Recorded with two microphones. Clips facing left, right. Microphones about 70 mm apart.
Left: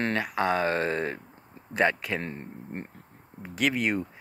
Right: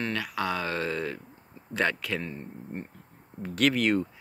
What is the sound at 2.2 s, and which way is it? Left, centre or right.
Speech, left.